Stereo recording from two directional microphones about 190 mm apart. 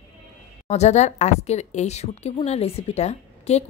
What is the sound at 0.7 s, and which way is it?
A woman's voice, 35° left (ahead or behind).